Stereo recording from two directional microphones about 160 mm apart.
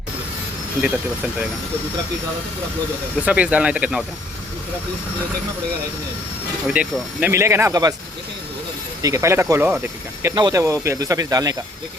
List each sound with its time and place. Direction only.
0.8 s speech: 10° right (ahead or behind)
3.2 s speech: 10° right (ahead or behind)
6.7 s speech: 10° right (ahead or behind)
9.0 s speech: 20° right (ahead or behind)